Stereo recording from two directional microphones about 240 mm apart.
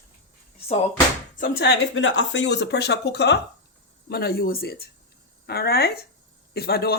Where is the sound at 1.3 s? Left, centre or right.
Left.